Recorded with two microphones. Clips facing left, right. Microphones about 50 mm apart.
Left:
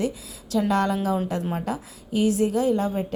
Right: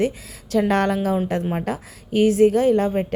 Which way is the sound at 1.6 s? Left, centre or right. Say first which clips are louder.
Right 2 dB; right.